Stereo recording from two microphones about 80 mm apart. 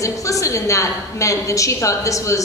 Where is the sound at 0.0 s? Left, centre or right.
Left.